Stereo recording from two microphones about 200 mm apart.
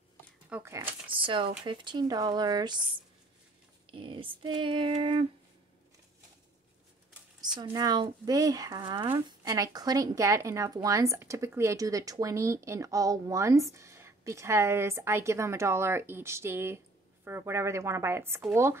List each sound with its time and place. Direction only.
0.5 s speech: 10° right (ahead or behind)
1.0 s speech: 25° right (ahead or behind)
3.9 s speech: 25° right (ahead or behind)
7.5 s speech: 20° right (ahead or behind)